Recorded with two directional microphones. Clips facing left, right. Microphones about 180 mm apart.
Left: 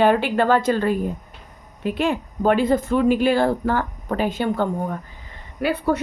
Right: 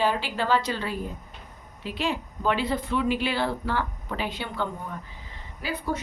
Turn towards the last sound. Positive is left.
turn(degrees=65)  # may be behind; listen again after turning